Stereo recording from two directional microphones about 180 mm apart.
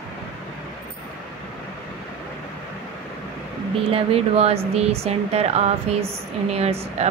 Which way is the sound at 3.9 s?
35° right (ahead or behind).